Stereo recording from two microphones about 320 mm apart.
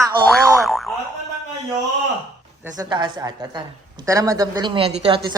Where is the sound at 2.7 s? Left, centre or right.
Centre.